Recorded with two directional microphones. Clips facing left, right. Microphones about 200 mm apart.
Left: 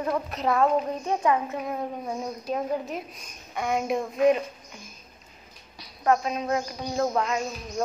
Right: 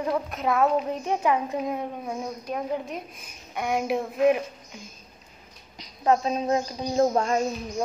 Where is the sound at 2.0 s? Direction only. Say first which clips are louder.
Left 1 dB; centre (ahead or behind).